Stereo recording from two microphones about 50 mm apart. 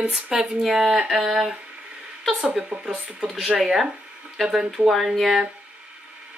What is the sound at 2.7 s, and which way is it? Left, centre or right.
Speech, right.